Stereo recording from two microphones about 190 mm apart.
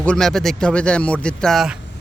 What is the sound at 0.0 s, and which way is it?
Speech, 5° left (ahead or behind).